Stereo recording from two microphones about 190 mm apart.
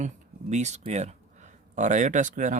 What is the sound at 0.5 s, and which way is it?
Speech, 35° right (ahead or behind).